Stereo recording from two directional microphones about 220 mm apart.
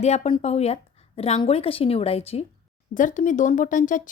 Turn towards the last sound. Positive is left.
turn(degrees=35)  # may be behind; listen again after turning